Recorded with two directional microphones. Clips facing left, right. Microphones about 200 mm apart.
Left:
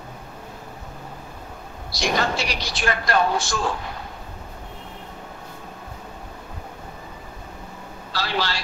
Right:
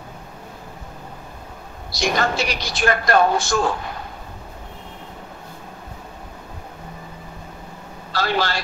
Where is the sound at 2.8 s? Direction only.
50° right (ahead or behind).